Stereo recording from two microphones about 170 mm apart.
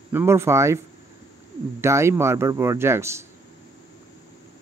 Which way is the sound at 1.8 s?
15° right (ahead or behind).